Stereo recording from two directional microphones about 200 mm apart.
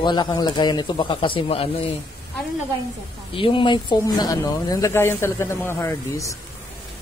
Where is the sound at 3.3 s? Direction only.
25° left (ahead or behind).